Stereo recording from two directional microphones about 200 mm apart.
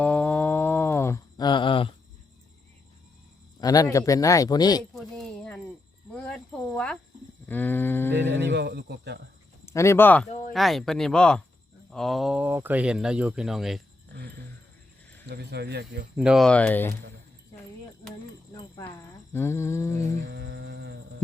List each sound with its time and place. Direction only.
0.0 s a sound: 5° left (ahead or behind); by 1.9 s 25° left (ahead or behind)
3.6 s speech: 20° left (ahead or behind)
4.9 s a sound: 5° left (ahead or behind)
6.1 s cricket: 5° left (ahead or behind)
7.4 s speech: 10° left (ahead or behind)
8.1 s speech: 60° right (ahead or behind)
9.6 s speech: 15° left (ahead or behind)
10.2 s speech: 35° left (ahead or behind)
10.5 s speech: centre (ahead or behind)
15.3 s speech: 55° right (ahead or behind)
16.1 s speech: 5° right (ahead or behind)
18.5 s a sound: 15° left (ahead or behind)
20.2 s humming: 60° right (ahead or behind)